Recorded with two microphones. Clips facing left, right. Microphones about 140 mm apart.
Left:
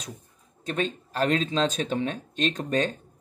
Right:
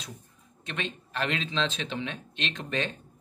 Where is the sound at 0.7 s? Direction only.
40° left (ahead or behind).